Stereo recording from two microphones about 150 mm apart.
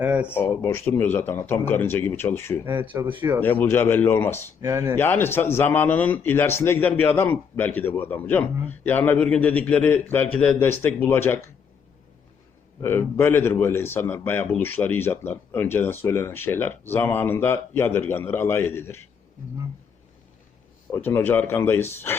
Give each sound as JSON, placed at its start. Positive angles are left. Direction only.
{"t": 0.0, "sound": "speech", "side_deg": -10}
{"t": 0.3, "sound": "a man's voice", "side_deg": 15}
{"t": 2.6, "sound": "speech", "side_deg": -15}
{"t": 3.4, "sound": "a man's voice", "side_deg": 10}
{"t": 4.6, "sound": "speech", "side_deg": -20}
{"t": 4.9, "sound": "a man's voice", "side_deg": 15}
{"t": 12.8, "sound": "a man's voice", "side_deg": 15}
{"t": 20.9, "sound": "a man's voice", "side_deg": 15}